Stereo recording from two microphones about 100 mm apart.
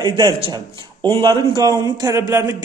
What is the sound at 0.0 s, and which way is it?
A man's voice, 45° right (ahead or behind).